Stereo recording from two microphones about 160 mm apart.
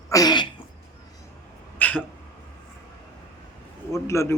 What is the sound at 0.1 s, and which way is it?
Sneeze, 25° left (ahead or behind).